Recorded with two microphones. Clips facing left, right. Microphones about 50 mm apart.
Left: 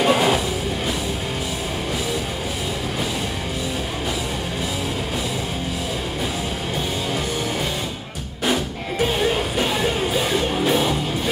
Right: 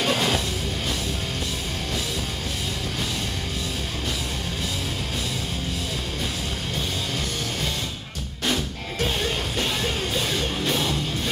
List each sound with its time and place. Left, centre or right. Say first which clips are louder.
0.0 s music: left 6 dB; centre
9.0 s music: left 6 dB; centre